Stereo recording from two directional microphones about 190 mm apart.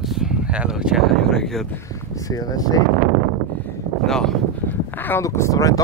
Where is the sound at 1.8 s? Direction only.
15° left (ahead or behind).